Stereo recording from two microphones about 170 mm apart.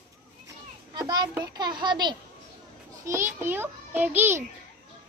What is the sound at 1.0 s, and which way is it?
A child's voice, 25° right (ahead or behind).